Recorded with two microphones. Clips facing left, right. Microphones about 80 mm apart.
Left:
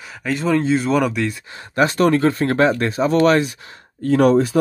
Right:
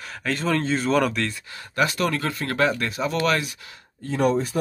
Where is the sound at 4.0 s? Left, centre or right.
Left.